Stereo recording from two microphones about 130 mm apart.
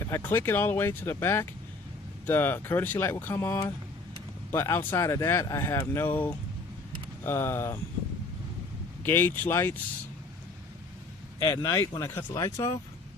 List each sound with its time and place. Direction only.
0.0 s speech: 20° left (ahead or behind)
9.0 s speech: 15° left (ahead or behind)
11.3 s speech: 25° left (ahead or behind)